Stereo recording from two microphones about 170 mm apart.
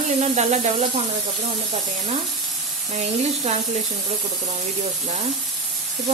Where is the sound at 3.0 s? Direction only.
40° right (ahead or behind).